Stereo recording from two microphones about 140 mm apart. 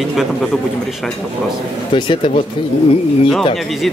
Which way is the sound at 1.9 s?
40° left (ahead or behind).